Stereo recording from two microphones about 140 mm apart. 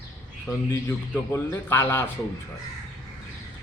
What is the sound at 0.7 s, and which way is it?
A man's voice, 20° left (ahead or behind).